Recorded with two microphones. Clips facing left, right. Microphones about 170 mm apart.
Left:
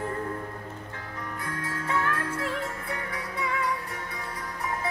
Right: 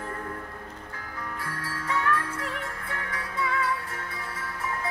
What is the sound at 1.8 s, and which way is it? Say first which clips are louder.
Music: right 2 dB; 25° left (ahead or behind).